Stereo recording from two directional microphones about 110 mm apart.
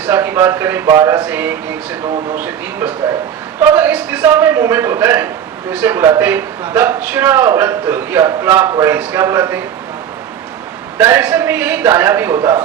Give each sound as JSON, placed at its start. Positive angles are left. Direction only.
{"t": 0.0, "sound": "a man's voice", "side_deg": -20}
{"t": 10.9, "sound": "a man's voice", "side_deg": -20}